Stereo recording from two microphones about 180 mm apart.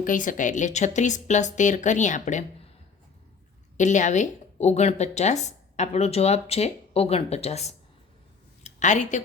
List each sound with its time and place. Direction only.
0.0 s a woman's voice: 45° left (ahead or behind)
3.8 s a woman's voice: 45° left (ahead or behind)